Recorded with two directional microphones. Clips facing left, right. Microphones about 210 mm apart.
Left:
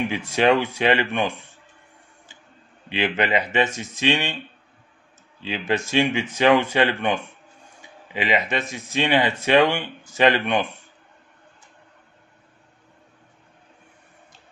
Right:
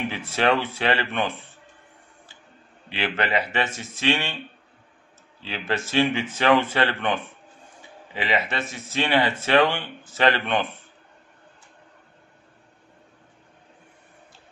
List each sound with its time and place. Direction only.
0.1 s speech: 15° left (ahead or behind)
2.9 s speech: 15° left (ahead or behind)
5.4 s speech: 15° left (ahead or behind)